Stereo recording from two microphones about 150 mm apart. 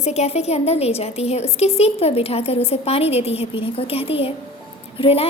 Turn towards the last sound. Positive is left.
turn(degrees=40)  # may be behind; listen again after turning